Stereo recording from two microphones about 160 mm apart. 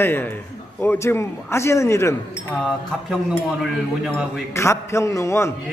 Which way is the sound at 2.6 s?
5° right (ahead or behind).